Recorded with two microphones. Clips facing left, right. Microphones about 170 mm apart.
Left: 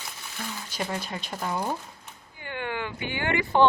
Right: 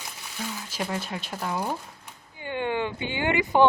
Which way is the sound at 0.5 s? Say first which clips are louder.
Even; centre (ahead or behind).